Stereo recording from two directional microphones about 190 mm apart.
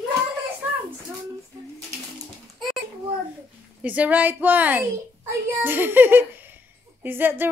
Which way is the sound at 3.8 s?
10° right (ahead or behind).